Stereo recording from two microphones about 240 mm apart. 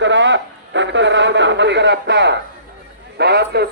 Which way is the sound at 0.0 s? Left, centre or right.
Right.